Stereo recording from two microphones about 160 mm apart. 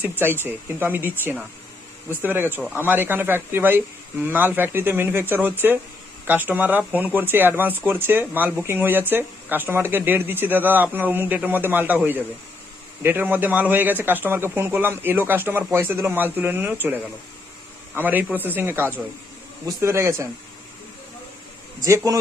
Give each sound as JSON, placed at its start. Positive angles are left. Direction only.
{"t": 0.0, "sound": "speech", "side_deg": -15}
{"t": 21.8, "sound": "a man's voice", "side_deg": -20}